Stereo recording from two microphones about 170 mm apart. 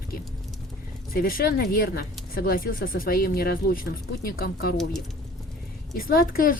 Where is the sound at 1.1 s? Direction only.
60° left (ahead or behind).